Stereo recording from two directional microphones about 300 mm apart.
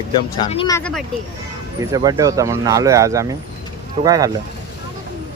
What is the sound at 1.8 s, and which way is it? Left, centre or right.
Speech, centre.